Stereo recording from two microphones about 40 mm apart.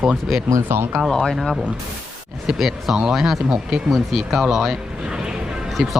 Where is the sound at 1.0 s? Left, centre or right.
Centre.